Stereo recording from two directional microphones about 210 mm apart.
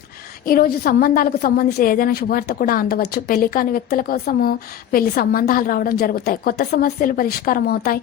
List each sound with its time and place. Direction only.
0.4 s a woman's voice: 45° left (ahead or behind)